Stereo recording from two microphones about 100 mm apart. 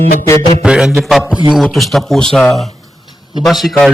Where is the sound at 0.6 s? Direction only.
10° right (ahead or behind).